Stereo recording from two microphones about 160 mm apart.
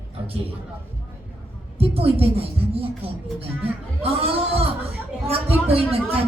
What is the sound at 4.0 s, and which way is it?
Speech, 40° right (ahead or behind).